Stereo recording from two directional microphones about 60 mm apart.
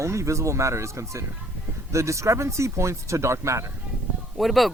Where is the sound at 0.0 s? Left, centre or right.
Right.